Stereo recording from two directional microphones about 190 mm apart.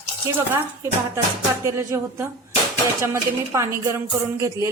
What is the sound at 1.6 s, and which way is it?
A woman's voice, 15° right (ahead or behind).